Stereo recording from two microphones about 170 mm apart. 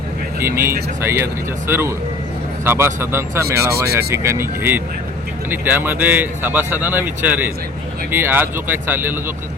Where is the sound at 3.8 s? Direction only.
70° right (ahead or behind).